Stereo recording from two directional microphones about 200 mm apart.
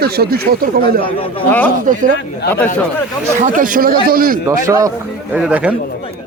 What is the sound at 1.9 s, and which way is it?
Speech, 40° right (ahead or behind).